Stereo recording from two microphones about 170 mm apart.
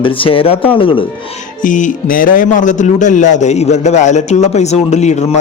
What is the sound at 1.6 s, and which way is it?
A man's voice, 50° left (ahead or behind).